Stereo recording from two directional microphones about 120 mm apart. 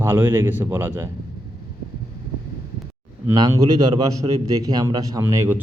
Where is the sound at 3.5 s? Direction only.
30° right (ahead or behind).